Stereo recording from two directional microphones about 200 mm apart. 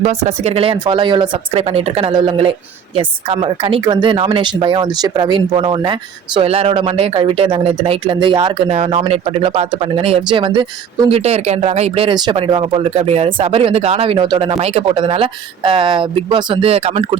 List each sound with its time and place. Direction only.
0.0 s speech: 35° right (ahead or behind)